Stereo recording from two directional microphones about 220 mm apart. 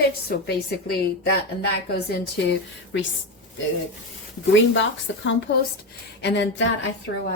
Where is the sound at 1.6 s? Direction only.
45° left (ahead or behind).